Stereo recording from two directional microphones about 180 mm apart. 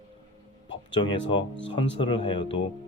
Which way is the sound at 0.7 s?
25° left (ahead or behind).